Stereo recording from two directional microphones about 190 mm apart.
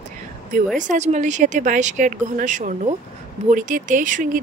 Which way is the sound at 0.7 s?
40° right (ahead or behind).